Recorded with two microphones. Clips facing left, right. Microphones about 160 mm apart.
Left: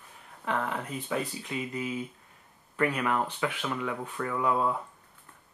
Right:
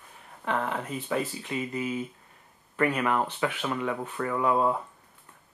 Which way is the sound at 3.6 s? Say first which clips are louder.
Right 3 dB; 25° right (ahead or behind).